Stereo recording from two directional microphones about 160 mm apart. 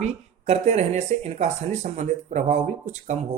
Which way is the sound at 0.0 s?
40° right (ahead or behind).